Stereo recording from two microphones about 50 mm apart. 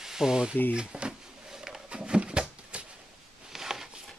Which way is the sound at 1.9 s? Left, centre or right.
Right.